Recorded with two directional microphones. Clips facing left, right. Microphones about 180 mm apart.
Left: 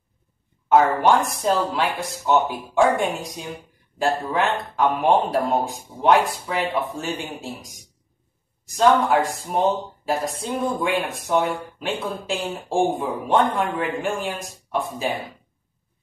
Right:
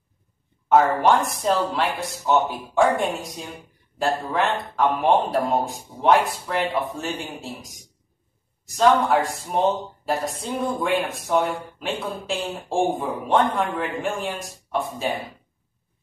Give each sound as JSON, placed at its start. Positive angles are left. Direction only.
{"t": 0.7, "sound": "speech", "side_deg": 0}
{"t": 8.7, "sound": "speech", "side_deg": 0}